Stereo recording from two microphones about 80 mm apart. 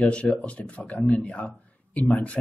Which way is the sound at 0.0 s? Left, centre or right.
Centre.